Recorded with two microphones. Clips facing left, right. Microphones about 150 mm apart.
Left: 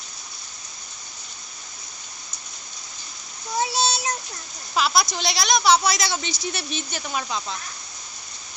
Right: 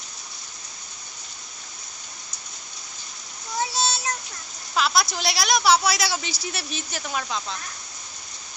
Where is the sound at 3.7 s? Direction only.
15° left (ahead or behind).